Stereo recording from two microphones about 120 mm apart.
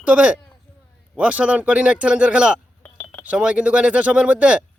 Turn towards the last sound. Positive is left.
turn(degrees=-10)  # may be behind; listen again after turning